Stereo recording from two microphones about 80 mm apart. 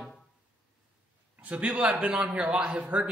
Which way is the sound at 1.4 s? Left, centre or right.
Centre.